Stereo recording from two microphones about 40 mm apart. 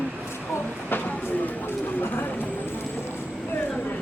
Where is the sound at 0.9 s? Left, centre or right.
Left.